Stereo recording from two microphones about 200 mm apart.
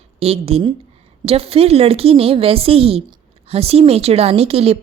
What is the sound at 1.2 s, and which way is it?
A woman's voice, 30° right (ahead or behind).